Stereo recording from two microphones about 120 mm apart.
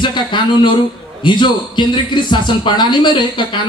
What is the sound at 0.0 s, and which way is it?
Speech, 40° left (ahead or behind).